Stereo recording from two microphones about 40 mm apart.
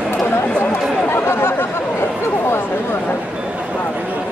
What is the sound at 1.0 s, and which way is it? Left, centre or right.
Chatter, left.